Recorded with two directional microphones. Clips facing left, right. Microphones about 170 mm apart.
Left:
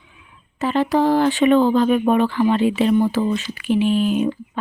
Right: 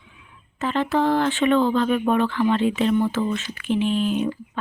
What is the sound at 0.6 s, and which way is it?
Speech, 15° left (ahead or behind).